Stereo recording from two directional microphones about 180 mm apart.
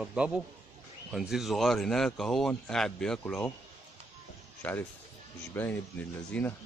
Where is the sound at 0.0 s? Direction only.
5° right (ahead or behind).